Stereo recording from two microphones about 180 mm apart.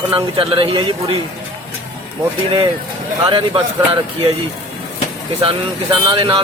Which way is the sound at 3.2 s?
30° right (ahead or behind).